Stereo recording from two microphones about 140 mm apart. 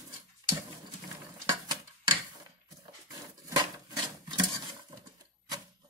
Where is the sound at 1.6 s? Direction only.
30° right (ahead or behind).